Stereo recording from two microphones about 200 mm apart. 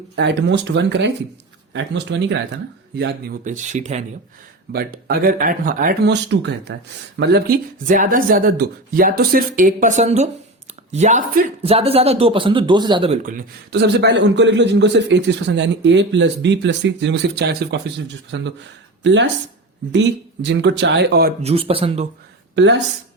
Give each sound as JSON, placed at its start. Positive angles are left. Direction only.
{"t": 0.2, "sound": "a man's voice", "side_deg": -60}
{"t": 3.4, "sound": "speech", "side_deg": -40}
{"t": 4.7, "sound": "speech", "side_deg": -50}
{"t": 11.6, "sound": "a man's voice", "side_deg": -30}
{"t": 13.2, "sound": "a man's voice", "side_deg": -50}
{"t": 21.4, "sound": "a man's voice", "side_deg": -30}
{"t": 22.5, "sound": "a man's voice", "side_deg": -65}